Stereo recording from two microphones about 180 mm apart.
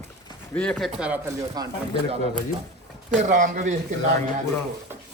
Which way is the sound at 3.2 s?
45° right (ahead or behind).